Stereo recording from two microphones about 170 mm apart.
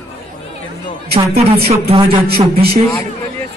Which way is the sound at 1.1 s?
35° right (ahead or behind).